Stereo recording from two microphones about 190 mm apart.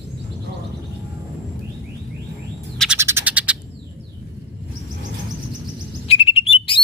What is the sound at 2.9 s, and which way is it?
Frog, 10° right (ahead or behind).